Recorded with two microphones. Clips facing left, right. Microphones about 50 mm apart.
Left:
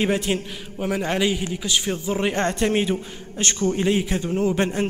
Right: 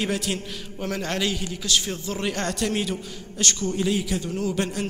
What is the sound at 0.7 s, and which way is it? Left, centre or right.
A man's voice, centre.